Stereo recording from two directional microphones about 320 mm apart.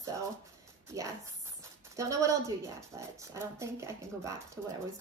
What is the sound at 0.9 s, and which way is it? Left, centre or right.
A woman's voice, centre.